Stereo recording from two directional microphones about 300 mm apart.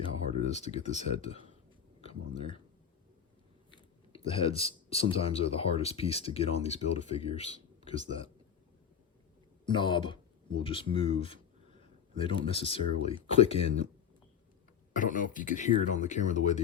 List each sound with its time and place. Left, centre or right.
0.5 s speech: left
4.1 s speech: centre
9.6 s speech: centre
11.2 s a sound: centre
12.2 s speech: centre
14.9 s speech: left